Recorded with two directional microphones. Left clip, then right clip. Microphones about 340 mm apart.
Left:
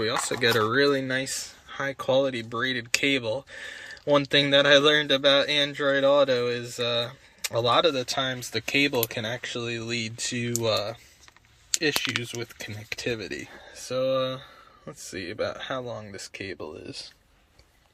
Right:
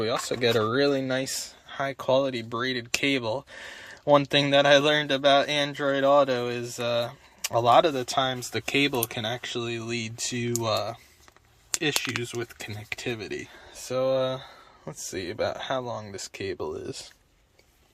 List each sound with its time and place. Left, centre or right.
0.0 s speech: centre